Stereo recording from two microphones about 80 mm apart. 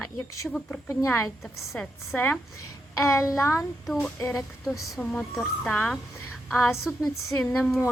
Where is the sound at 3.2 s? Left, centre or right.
Left.